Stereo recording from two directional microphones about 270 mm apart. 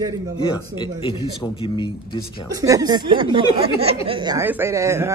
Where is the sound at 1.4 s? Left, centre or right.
Centre.